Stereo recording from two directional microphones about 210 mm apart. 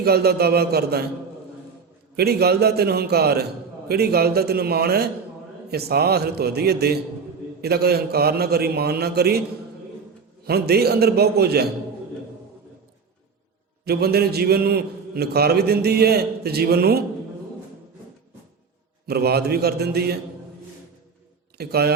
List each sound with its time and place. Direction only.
0.0 s a man's voice: 50° right (ahead or behind)
2.1 s a man's voice: 50° right (ahead or behind)
10.4 s a man's voice: 50° right (ahead or behind)
13.8 s a man's voice: 50° right (ahead or behind)
19.0 s a man's voice: 50° right (ahead or behind)
21.6 s a man's voice: 50° right (ahead or behind)